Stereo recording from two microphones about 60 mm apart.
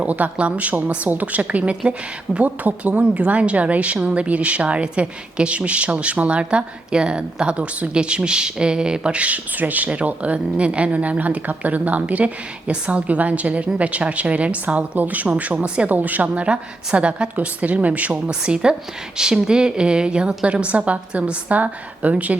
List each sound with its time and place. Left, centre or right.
0.0 s a woman's voice: right
15.9 s a woman's voice: right
18.3 s a woman's voice: centre